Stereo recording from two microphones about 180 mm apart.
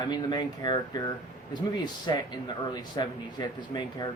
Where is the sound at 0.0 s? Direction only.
25° left (ahead or behind).